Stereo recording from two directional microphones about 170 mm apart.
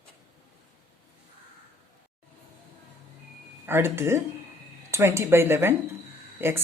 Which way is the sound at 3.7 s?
15° right (ahead or behind).